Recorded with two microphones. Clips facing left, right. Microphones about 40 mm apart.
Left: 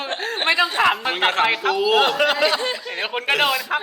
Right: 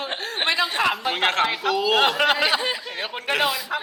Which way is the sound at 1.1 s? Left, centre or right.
Centre.